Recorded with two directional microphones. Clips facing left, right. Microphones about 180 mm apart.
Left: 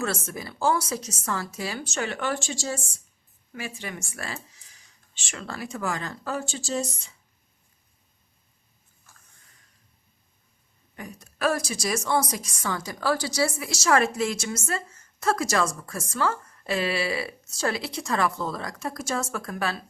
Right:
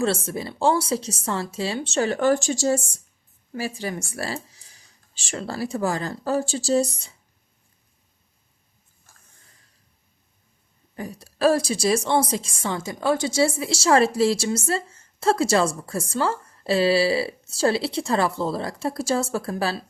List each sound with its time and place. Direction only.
0.0 s speech: 30° right (ahead or behind)
10.9 s a woman's voice: 35° right (ahead or behind)